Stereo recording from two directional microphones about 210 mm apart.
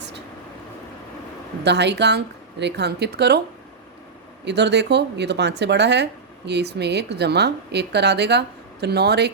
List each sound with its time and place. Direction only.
1.6 s speech: 55° right (ahead or behind)
4.4 s speech: 55° right (ahead or behind)